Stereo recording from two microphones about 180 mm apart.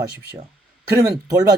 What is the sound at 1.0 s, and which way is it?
Speech, 20° right (ahead or behind).